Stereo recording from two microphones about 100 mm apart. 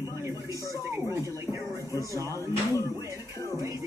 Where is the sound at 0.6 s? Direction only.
35° left (ahead or behind).